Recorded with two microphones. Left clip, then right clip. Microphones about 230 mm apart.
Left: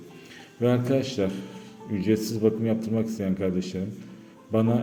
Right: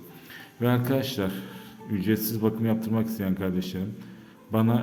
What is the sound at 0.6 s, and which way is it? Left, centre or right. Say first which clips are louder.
A man's voice: left 2 dB; centre.